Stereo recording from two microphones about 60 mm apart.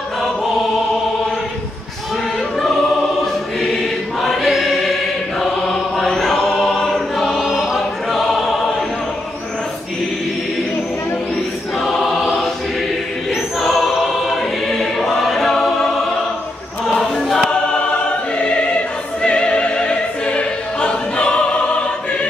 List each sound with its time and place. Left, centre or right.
4.2 s choir: centre
8.1 s opera: centre
11.8 s choir: centre
13.7 s choir: centre
17.5 s choir: centre
19.2 s opera: centre